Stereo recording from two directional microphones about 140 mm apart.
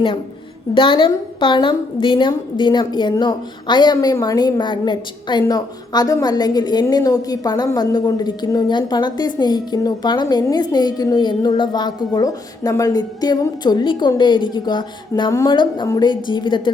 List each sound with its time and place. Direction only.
0.7 s a woman's voice: 35° left (ahead or behind)
15.3 s a woman's voice: 20° left (ahead or behind)